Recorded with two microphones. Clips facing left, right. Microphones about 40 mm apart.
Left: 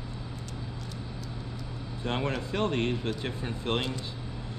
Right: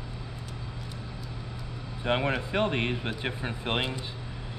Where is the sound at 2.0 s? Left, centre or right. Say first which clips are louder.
Right 4 dB; right.